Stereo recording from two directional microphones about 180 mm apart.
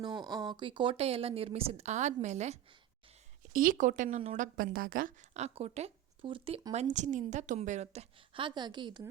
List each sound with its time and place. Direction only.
0.0 s a woman's voice: 25° right (ahead or behind)
3.5 s speech: 50° right (ahead or behind); by 6.6 s 30° right (ahead or behind)
6.9 s a woman's voice: 40° right (ahead or behind); by 9.0 s 25° right (ahead or behind)